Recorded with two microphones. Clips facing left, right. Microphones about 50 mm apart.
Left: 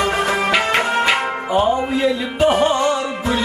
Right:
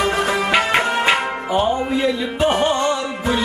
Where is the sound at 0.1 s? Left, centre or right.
Left.